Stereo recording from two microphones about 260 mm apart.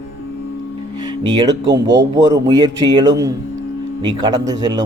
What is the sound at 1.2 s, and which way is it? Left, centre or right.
A man's voice, centre.